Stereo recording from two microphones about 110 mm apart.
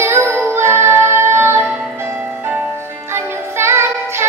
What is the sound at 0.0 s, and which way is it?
Music, 20° right (ahead or behind).